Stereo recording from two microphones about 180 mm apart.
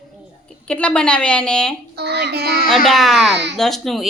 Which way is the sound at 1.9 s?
65° right (ahead or behind).